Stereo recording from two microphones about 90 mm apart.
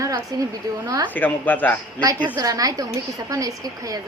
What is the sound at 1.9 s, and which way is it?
Speech, 55° right (ahead or behind).